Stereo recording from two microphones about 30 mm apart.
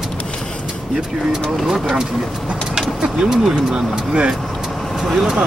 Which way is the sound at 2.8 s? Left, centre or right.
Right.